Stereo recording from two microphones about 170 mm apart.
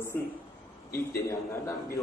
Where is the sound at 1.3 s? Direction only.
15° left (ahead or behind).